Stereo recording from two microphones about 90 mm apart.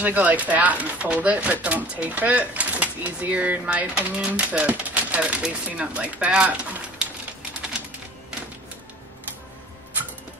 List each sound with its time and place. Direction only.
0.0 s speech: 15° right (ahead or behind)